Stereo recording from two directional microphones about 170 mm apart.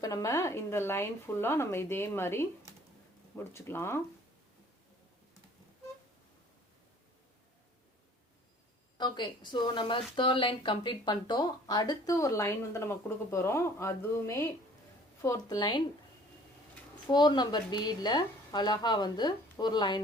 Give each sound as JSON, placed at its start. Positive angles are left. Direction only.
{"t": 0.0, "sound": "a woman's voice", "side_deg": 20}
{"t": 9.0, "sound": "a woman's voice", "side_deg": 25}
{"t": 17.1, "sound": "a woman's voice", "side_deg": 25}